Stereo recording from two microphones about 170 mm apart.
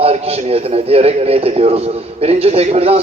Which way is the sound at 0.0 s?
35° right (ahead or behind).